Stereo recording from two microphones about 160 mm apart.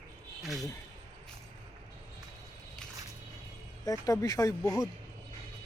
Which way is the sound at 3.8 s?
20° left (ahead or behind).